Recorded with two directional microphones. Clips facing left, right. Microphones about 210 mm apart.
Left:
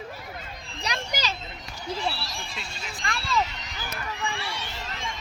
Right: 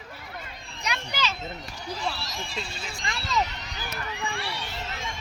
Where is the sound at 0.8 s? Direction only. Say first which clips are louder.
Even; 35° left (ahead or behind).